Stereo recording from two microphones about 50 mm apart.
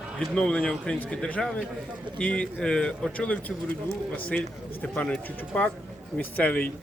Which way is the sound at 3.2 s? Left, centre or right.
Left.